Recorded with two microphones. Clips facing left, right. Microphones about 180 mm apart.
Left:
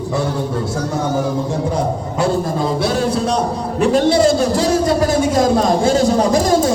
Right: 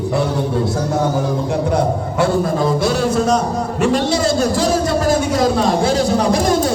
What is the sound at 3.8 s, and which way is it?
Speech, 45° left (ahead or behind).